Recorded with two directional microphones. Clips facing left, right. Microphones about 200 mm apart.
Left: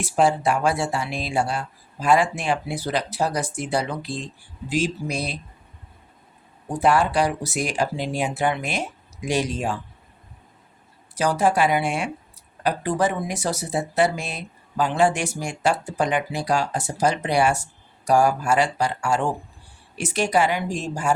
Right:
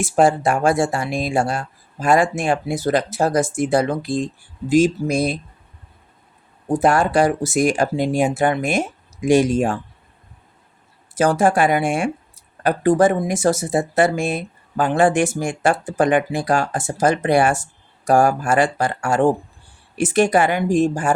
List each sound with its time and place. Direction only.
0.0 s speech: 45° right (ahead or behind)
6.7 s speech: 45° right (ahead or behind)
11.1 s speech: 50° right (ahead or behind)